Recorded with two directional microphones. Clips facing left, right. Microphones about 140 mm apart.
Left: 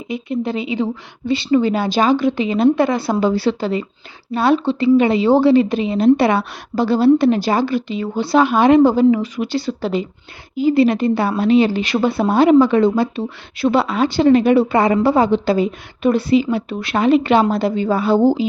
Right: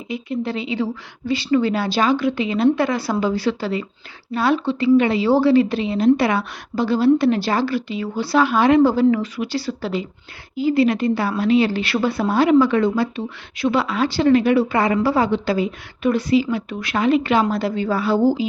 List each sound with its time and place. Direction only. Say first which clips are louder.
0.1 s speech: left 3 dB; 20° left (ahead or behind)
7.3 s speech: left 3 dB; 15° left (ahead or behind)